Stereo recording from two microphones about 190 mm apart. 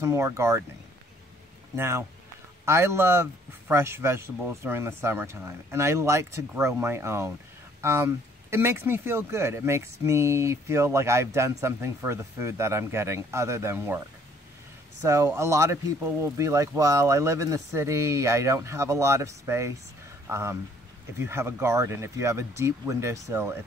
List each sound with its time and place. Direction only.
0.0 s speech: 15° right (ahead or behind)
1.8 s speech: 15° right (ahead or behind)
15.0 s speech: 15° right (ahead or behind)